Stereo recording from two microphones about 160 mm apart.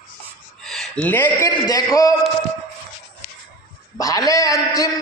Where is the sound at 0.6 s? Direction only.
5° left (ahead or behind).